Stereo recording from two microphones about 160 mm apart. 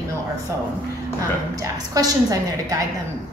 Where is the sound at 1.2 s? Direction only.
20° right (ahead or behind).